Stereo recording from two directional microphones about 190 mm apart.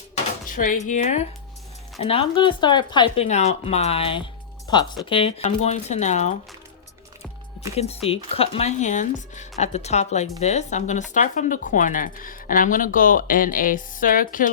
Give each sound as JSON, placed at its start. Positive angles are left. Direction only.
{"t": 0.4, "sound": "speech", "side_deg": 45}
{"t": 3.2, "sound": "speech", "side_deg": 35}
{"t": 7.8, "sound": "speech", "side_deg": 30}